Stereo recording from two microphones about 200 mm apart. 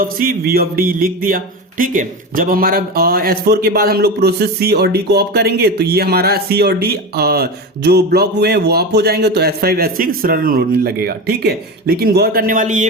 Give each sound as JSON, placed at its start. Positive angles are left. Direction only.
{"t": 0.0, "sound": "speech", "side_deg": -45}